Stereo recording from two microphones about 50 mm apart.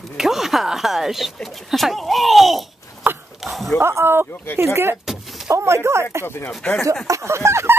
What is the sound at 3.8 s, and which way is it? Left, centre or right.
Speech, right.